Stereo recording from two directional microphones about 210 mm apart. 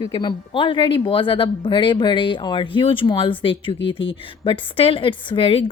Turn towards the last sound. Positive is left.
turn(degrees=25)  # may be behind; listen again after turning